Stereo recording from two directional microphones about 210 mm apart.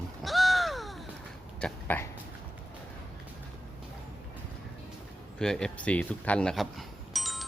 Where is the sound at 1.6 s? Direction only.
5° left (ahead or behind).